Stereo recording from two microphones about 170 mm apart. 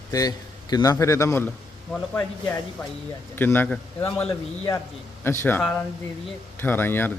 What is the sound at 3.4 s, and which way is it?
A man's voice, 10° left (ahead or behind).